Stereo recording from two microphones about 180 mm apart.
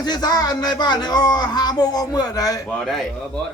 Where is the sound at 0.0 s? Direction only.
20° left (ahead or behind).